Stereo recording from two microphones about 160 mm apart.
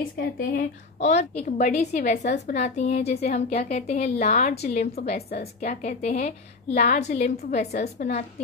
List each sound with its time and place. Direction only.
0.4 s a woman's voice: 60° left (ahead or behind)
1.1 s a woman's voice: 45° left (ahead or behind)
4.3 s a woman's voice: 55° left (ahead or behind)